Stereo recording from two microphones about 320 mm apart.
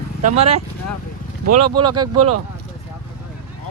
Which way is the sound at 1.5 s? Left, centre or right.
Right.